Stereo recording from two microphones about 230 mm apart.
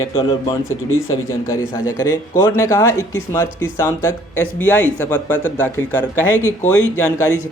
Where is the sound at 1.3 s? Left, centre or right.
Centre.